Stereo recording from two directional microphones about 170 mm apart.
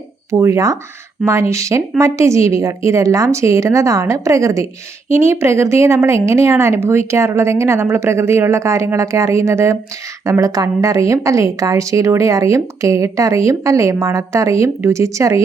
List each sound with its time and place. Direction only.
0.3 s a woman's voice: 15° right (ahead or behind)